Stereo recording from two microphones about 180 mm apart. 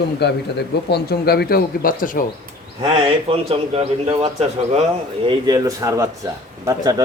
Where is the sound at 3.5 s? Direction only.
35° right (ahead or behind).